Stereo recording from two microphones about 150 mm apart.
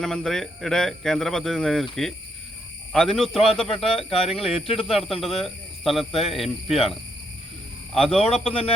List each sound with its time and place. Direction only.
0.0 s speech: 5° left (ahead or behind)
3.3 s a man's voice: 40° left (ahead or behind)
4.9 s speech: centre (ahead or behind)
7.9 s a man's voice: 40° left (ahead or behind)